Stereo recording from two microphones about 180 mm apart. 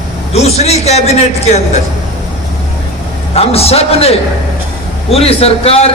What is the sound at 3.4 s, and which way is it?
A man's voice, 35° left (ahead or behind).